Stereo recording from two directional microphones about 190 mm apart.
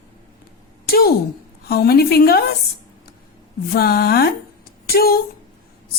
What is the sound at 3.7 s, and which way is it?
A woman's voice, 55° left (ahead or behind).